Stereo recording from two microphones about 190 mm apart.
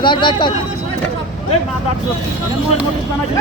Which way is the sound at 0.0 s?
25° left (ahead or behind).